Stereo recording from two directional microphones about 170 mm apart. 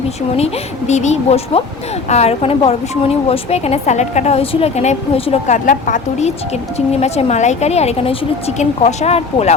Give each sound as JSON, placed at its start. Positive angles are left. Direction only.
{"t": 0.3, "sound": "speech", "side_deg": 40}
{"t": 5.6, "sound": "speech", "side_deg": 50}